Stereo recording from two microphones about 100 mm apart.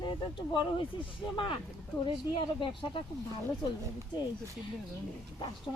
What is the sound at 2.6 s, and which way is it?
Speech, 55° left (ahead or behind).